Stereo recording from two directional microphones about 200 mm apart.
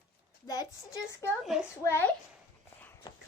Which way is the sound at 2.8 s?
10° left (ahead or behind).